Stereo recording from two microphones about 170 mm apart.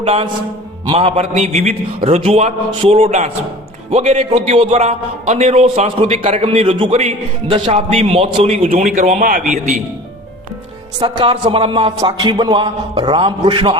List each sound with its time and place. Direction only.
0.0 s a man's voice: 35° right (ahead or behind); by 9.4 s 50° right (ahead or behind)
11.0 s a man's voice: 30° right (ahead or behind)